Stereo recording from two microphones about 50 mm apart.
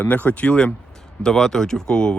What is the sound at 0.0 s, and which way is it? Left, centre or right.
Speech, left.